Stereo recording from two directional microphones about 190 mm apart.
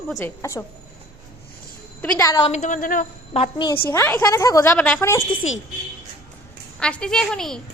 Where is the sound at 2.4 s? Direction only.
35° left (ahead or behind).